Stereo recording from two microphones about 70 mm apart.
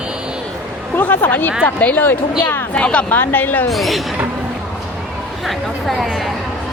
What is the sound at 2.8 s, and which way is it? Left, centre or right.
Speech, centre.